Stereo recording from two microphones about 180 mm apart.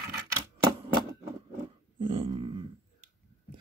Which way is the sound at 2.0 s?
30° right (ahead or behind).